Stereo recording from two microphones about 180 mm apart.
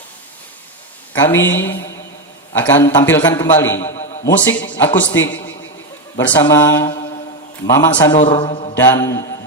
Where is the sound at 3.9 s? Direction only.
40° left (ahead or behind).